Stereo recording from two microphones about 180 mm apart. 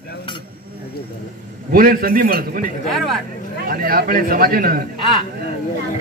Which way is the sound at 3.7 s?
55° right (ahead or behind).